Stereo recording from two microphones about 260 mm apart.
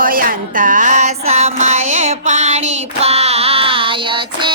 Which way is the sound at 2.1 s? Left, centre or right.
Right.